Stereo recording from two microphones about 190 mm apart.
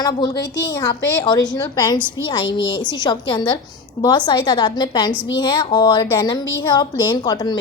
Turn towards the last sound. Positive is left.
turn(degrees=20)  # may be behind; listen again after turning